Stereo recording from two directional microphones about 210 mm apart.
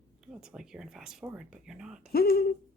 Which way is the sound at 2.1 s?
50° left (ahead or behind).